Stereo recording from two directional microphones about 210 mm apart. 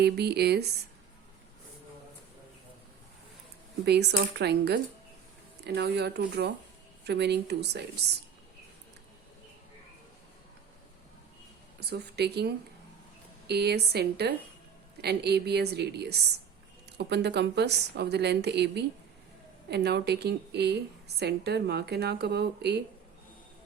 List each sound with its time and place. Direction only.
0.0 s a woman's voice: 50° right (ahead or behind)
3.8 s a woman's voice: 55° right (ahead or behind)
11.8 s a woman's voice: 50° right (ahead or behind)